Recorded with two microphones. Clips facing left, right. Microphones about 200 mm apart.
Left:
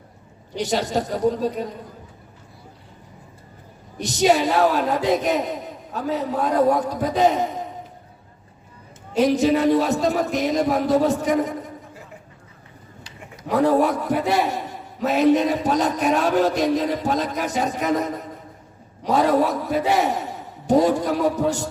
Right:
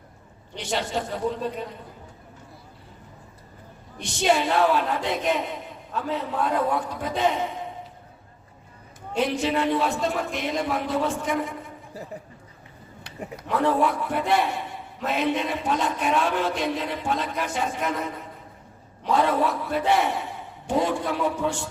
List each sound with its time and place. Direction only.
0.5 s a man's voice: 40° left (ahead or behind)
3.9 s a man's voice: 40° left (ahead or behind)
9.1 s a man's voice: 40° left (ahead or behind)
13.5 s a man's voice: 40° left (ahead or behind)